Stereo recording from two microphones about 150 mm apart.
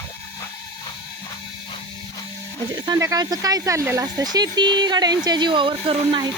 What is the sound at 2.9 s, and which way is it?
Speech, 20° right (ahead or behind).